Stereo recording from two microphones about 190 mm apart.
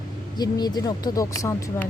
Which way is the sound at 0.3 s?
20° left (ahead or behind).